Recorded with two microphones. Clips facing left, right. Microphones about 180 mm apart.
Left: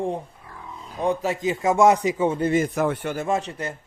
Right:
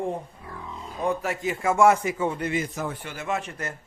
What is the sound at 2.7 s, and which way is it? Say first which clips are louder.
Speech: left 8 dB; 70° left (ahead or behind).